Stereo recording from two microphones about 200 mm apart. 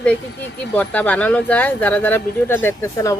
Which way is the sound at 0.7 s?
5° left (ahead or behind).